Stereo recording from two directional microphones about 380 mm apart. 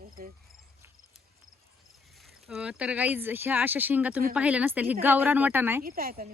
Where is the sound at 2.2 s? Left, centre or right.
Centre.